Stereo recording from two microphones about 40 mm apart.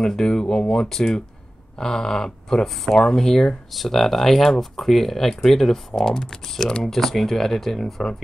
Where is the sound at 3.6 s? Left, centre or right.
Centre.